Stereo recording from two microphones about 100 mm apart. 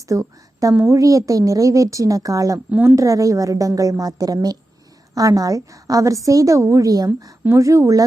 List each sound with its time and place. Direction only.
0.0 s a woman's voice: 35° right (ahead or behind)
2.6 s speech: 15° right (ahead or behind)
2.9 s a woman's voice: 35° right (ahead or behind)